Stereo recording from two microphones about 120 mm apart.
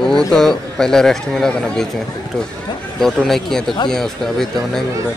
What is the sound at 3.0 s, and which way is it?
Speech, centre (ahead or behind).